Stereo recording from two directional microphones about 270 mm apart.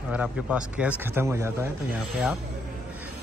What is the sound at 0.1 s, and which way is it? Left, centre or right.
A man's voice, centre.